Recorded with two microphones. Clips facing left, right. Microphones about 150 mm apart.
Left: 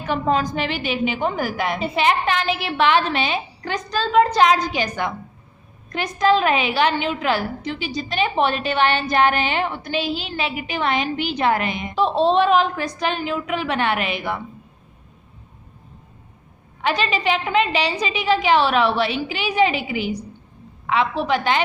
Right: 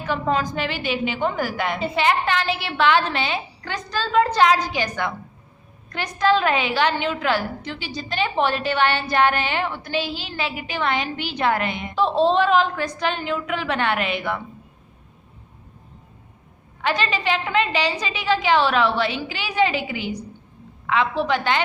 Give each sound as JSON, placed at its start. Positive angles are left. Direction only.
{"t": 0.1, "sound": "a woman's voice", "side_deg": 15}
{"t": 16.8, "sound": "a woman's voice", "side_deg": 15}
{"t": 20.8, "sound": "a woman's voice", "side_deg": 15}